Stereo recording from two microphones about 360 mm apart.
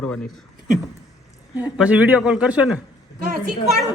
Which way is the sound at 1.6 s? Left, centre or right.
Centre.